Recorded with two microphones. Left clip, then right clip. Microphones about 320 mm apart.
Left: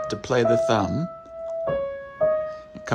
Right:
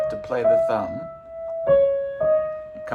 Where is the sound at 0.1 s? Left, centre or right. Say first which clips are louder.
Left 2 dB; left.